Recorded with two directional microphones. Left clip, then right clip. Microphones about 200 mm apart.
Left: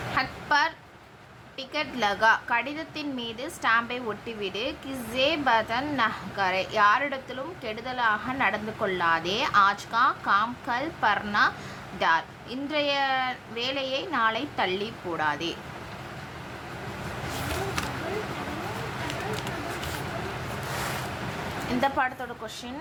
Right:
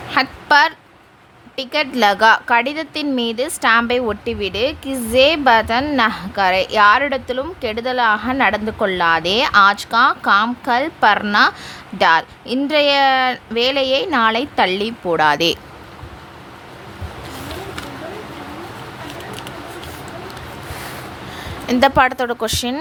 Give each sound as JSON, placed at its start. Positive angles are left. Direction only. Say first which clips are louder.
{"t": 0.1, "sound": "a woman's voice", "louder": "right 11 dB", "side_deg": -50}
{"t": 21.8, "sound": "a woman's voice", "louder": "right 13 dB", "side_deg": -50}